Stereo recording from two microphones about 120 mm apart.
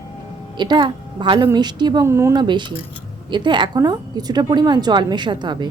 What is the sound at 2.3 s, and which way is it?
A woman's voice, 40° right (ahead or behind).